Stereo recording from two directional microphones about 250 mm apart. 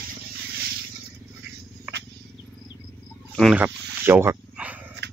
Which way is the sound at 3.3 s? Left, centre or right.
Centre.